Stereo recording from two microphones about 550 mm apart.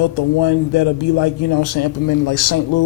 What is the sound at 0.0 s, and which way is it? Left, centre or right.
A man's voice, left.